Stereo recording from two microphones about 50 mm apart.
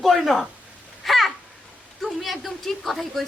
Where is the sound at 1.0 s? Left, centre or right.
Centre.